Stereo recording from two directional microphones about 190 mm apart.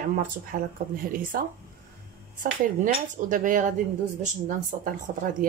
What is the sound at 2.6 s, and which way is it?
Speech, 45° right (ahead or behind).